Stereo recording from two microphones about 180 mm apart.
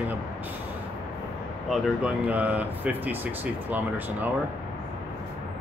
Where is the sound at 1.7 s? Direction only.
5° right (ahead or behind).